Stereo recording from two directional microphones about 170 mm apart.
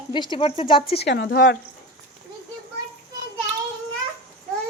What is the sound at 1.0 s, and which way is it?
Speech, 90° left.